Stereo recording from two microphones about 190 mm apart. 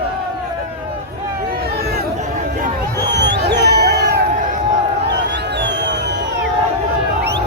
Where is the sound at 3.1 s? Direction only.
65° right (ahead or behind).